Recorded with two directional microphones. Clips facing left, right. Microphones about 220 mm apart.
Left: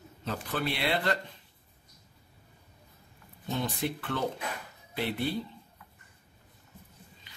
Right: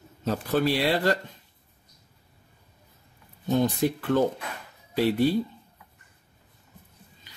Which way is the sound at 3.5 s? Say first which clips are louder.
Right 9 dB; 45° right (ahead or behind).